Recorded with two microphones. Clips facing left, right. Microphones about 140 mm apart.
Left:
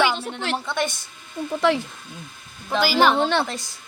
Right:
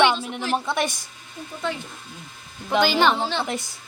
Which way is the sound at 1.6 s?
80° left.